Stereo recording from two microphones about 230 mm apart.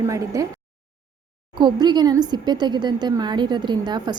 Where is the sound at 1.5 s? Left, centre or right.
Centre.